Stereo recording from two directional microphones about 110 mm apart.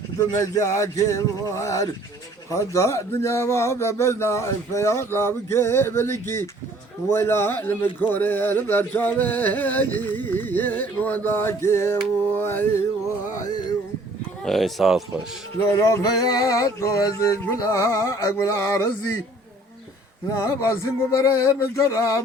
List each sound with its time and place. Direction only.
0.2 s a man's voice: 30° left (ahead or behind)
8.1 s music: 15° left (ahead or behind)
12.4 s a man's voice: 20° left (ahead or behind)
14.4 s speech: centre (ahead or behind)
15.7 s a man's voice: 25° left (ahead or behind)
20.4 s a man's voice: 25° left (ahead or behind)